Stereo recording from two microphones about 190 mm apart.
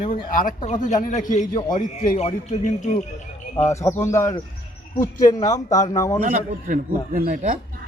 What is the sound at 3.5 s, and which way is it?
Speech, 15° left (ahead or behind).